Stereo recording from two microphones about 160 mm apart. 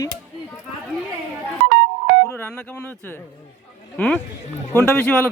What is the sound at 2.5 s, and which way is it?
Telephone, 5° left (ahead or behind).